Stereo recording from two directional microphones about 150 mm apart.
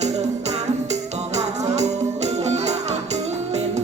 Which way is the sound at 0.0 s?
50° right (ahead or behind).